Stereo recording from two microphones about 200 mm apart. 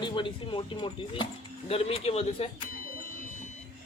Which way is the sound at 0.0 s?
25° left (ahead or behind).